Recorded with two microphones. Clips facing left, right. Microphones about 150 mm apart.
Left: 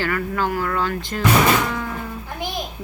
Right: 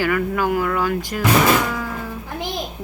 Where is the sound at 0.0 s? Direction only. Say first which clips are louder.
Right 3 dB; 10° right (ahead or behind).